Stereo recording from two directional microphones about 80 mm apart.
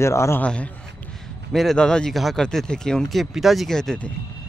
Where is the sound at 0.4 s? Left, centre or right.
Centre.